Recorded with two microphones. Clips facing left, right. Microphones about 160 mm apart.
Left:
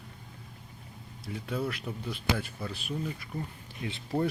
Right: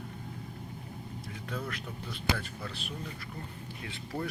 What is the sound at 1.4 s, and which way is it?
Speech, 10° left (ahead or behind).